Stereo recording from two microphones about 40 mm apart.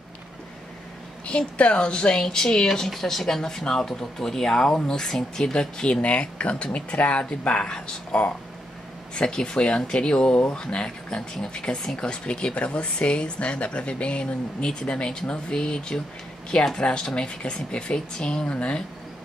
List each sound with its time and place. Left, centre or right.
1.2 s speech: left
5.9 s speech: left
7.6 s speech: left